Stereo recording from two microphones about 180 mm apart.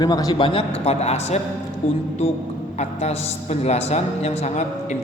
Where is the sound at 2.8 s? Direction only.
35° left (ahead or behind).